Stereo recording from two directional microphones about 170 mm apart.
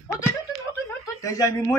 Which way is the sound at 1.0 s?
20° left (ahead or behind).